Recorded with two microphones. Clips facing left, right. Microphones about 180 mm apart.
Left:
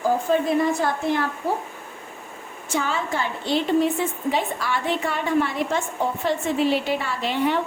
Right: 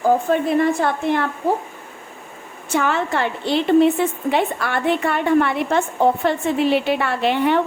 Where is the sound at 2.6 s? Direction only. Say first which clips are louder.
Right 5 dB; 65° right (ahead or behind).